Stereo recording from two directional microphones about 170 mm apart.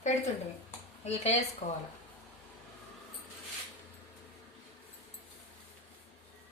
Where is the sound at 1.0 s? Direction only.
40° left (ahead or behind).